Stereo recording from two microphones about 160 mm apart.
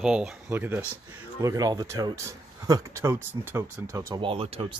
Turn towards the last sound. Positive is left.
turn(degrees=-35)  # may be behind; listen again after turning